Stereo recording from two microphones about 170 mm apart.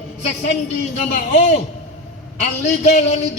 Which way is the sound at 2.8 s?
40° left (ahead or behind).